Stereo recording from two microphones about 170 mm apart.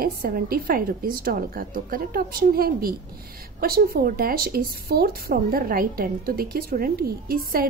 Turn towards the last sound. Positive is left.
turn(degrees=-60)  # may be behind; listen again after turning